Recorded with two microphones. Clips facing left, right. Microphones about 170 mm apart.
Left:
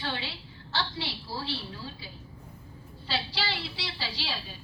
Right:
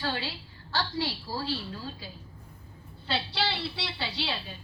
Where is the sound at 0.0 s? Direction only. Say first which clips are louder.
Right 2 dB; 40° right (ahead or behind).